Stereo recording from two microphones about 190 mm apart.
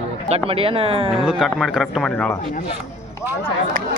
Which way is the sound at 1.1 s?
Centre (ahead or behind).